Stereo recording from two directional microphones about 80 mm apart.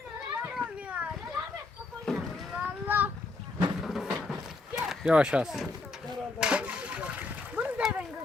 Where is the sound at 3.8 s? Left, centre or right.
Centre.